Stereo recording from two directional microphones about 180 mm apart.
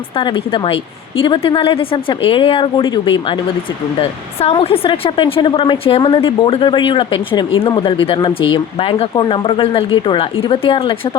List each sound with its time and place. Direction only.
0.2 s speech: 25° left (ahead or behind)